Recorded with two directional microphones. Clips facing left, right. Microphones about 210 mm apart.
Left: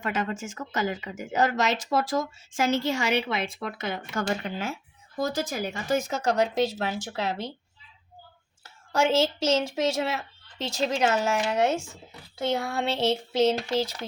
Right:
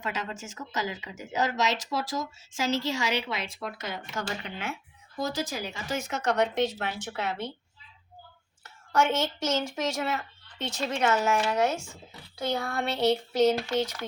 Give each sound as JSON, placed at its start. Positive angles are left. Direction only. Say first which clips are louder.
{"t": 0.0, "sound": "speech", "louder": "left 5 dB", "side_deg": 55}
{"t": 6.1, "sound": "speech", "louder": "left 2 dB", "side_deg": 35}
{"t": 8.6, "sound": "speech", "louder": "left 1 dB", "side_deg": 30}